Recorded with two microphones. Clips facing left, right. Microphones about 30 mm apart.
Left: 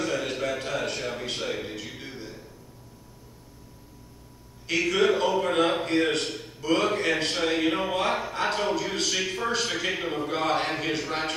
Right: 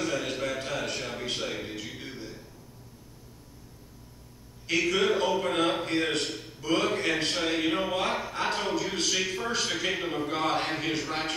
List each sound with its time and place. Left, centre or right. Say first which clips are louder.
0.0 s music: left 2 dB; centre
4.6 s a man's voice: left 2 dB; centre